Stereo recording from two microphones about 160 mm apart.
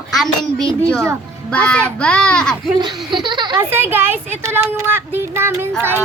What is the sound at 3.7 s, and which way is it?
Speech, 15° right (ahead or behind).